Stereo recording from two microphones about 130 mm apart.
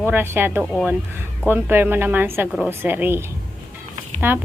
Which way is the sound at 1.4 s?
15° right (ahead or behind).